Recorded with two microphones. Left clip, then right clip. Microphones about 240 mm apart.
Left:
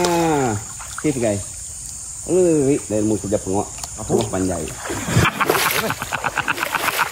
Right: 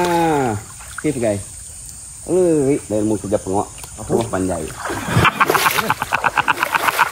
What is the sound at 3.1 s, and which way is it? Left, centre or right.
Speech, centre.